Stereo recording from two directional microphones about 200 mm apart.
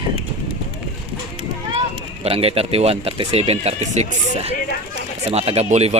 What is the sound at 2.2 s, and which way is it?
A man's voice, 30° right (ahead or behind).